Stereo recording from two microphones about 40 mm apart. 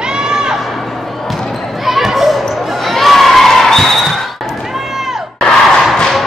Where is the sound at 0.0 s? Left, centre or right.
Centre.